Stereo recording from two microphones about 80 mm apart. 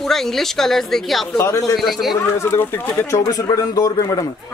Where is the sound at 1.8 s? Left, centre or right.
Centre.